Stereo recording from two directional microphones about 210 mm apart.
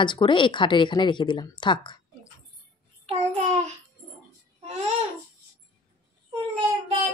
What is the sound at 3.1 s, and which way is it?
Child singing, 30° right (ahead or behind).